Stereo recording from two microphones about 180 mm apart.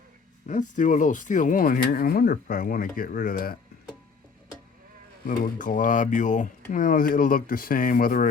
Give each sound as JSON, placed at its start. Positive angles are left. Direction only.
{"t": 0.4, "sound": "speech", "side_deg": 45}
{"t": 5.4, "sound": "speech", "side_deg": 45}